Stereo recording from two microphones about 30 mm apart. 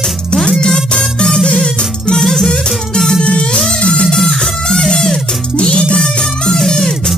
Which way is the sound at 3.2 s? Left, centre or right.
Left.